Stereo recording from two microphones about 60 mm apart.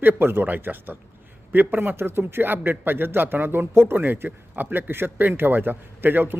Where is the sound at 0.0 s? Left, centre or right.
Right.